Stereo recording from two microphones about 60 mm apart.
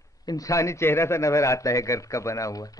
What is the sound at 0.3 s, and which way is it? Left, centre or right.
Speech, left.